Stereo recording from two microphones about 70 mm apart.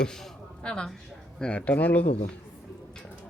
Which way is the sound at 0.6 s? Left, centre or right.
Centre.